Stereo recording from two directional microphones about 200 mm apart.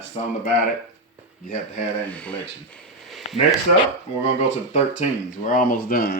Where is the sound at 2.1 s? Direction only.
5° left (ahead or behind).